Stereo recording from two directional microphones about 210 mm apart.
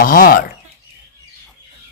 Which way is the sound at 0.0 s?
40° left (ahead or behind).